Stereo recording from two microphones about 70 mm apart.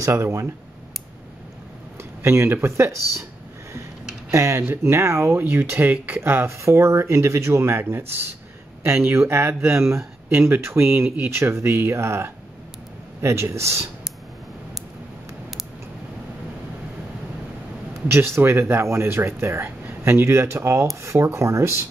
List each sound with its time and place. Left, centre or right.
0.0 s speech: right
2.2 s speech: right
4.3 s speech: right
18.0 s speech: right